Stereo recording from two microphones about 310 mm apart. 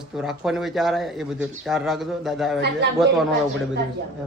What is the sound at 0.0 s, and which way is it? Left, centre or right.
A man's voice, centre.